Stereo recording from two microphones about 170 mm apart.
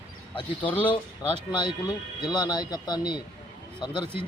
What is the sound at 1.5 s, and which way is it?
Speech, 25° left (ahead or behind).